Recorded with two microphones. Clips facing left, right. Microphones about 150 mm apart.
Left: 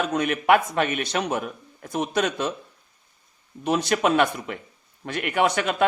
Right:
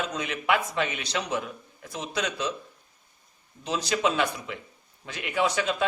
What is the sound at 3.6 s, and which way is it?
A man's voice, 55° left (ahead or behind).